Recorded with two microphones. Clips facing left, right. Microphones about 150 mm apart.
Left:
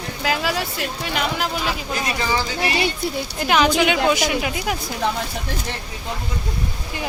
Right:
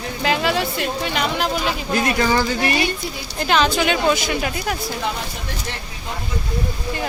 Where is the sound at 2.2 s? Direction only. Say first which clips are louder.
Right 4 dB; 55° right (ahead or behind).